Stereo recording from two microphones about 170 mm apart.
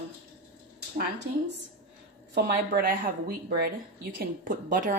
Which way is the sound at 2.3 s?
60° right (ahead or behind).